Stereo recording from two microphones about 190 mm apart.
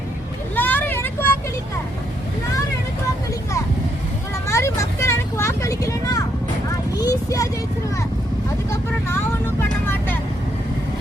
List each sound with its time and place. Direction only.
0.5 s vehicle: 10° left (ahead or behind)
4.4 s vehicle: 15° left (ahead or behind)
6.9 s a sound: 20° left (ahead or behind)
8.7 s vehicle: 10° left (ahead or behind)